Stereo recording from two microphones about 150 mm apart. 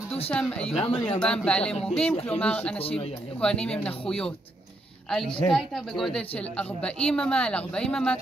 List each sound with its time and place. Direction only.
0.3 s speech: 5° left (ahead or behind)
0.7 s speech: 40° left (ahead or behind)
1.2 s speech: 5° left (ahead or behind)
2.8 s speech: 40° left (ahead or behind)
3.3 s speech: 5° left (ahead or behind)
5.1 s a woman's voice: 5° left (ahead or behind)